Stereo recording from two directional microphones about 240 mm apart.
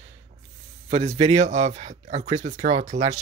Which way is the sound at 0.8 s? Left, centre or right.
Right.